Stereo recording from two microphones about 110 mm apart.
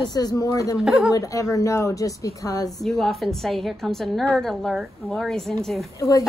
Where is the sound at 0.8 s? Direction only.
5° right (ahead or behind).